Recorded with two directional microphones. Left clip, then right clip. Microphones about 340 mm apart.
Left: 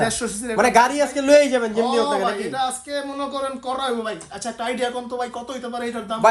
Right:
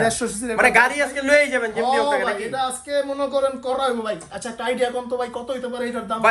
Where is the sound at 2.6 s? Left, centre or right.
Centre.